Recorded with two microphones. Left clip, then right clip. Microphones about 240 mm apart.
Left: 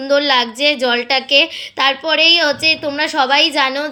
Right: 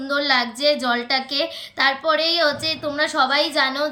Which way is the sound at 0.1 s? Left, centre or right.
Centre.